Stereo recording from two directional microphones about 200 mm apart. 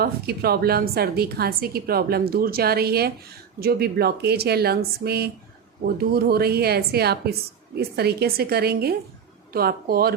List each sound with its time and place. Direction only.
0.0 s a woman's voice: 50° right (ahead or behind)